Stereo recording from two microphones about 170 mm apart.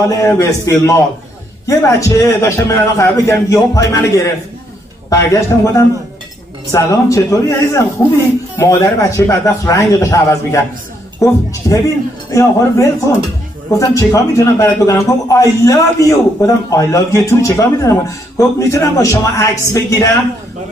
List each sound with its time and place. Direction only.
0.1 s a man's voice: 20° left (ahead or behind)
11.6 s a man's voice: 15° left (ahead or behind)